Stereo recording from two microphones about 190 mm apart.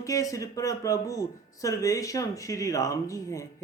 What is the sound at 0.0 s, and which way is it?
Speech, 15° left (ahead or behind).